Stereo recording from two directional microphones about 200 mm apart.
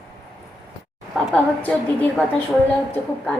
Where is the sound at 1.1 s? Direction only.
5° left (ahead or behind).